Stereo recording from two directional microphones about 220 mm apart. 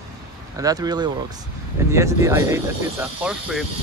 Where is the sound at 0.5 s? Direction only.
15° right (ahead or behind).